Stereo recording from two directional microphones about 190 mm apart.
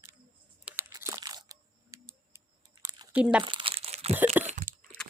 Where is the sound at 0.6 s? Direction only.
15° right (ahead or behind).